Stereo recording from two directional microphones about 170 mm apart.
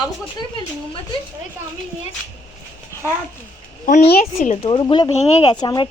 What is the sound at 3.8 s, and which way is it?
Speech, 45° left (ahead or behind).